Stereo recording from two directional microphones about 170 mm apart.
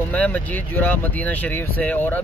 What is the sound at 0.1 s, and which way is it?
Speech, 10° left (ahead or behind).